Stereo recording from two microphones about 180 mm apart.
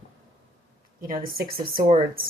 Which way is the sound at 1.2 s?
55° right (ahead or behind).